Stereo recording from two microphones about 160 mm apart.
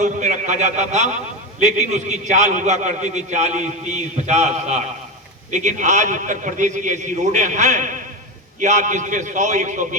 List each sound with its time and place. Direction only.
0.0 s a man's voice: 50° right (ahead or behind)